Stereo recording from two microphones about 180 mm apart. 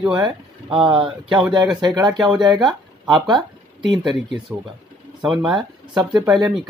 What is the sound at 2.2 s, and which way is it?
Speech, 25° right (ahead or behind).